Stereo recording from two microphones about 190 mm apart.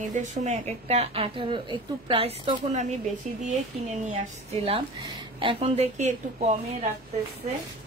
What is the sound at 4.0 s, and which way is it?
Speech, 35° right (ahead or behind).